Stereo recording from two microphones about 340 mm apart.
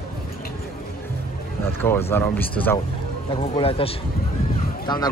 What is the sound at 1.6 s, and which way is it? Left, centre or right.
Speech, centre.